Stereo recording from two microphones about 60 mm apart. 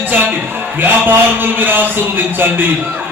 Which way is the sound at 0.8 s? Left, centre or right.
Right.